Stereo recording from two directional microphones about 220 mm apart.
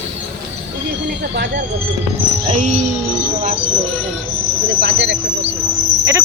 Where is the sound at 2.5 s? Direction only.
35° right (ahead or behind).